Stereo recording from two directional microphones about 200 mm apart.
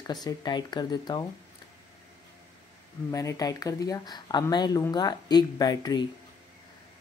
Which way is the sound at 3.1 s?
15° left (ahead or behind).